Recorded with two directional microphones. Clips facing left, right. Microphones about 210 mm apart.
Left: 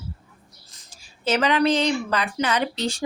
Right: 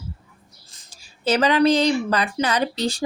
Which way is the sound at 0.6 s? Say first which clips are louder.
Even; 30° right (ahead or behind).